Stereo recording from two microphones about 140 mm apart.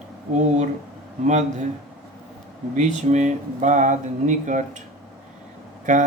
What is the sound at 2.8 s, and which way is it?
Speech, 60° right (ahead or behind).